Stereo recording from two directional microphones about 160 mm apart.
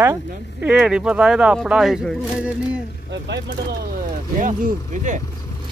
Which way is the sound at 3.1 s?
90° right.